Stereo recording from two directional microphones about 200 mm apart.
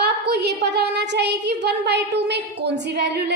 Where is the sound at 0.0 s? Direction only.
60° right (ahead or behind).